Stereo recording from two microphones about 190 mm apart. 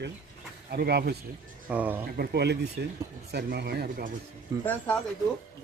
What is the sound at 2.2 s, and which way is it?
Speech, 60° right (ahead or behind).